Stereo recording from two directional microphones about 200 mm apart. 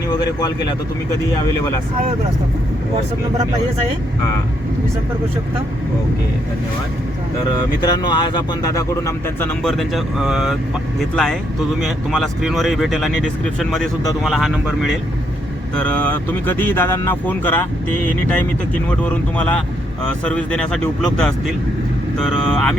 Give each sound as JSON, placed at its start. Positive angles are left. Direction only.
{"t": 0.1, "sound": "speech", "side_deg": 20}
{"t": 7.8, "sound": "speech", "side_deg": 20}
{"t": 9.6, "sound": "speech", "side_deg": 0}
{"t": 18.9, "sound": "speech", "side_deg": 5}